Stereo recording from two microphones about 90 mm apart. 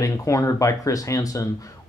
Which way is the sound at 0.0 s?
35° left (ahead or behind).